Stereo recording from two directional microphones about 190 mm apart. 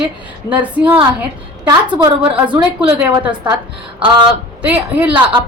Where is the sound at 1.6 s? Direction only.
25° right (ahead or behind).